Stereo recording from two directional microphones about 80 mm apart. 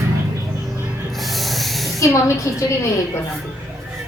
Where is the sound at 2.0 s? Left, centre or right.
Left.